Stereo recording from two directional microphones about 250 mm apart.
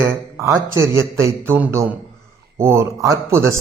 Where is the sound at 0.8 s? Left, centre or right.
Centre.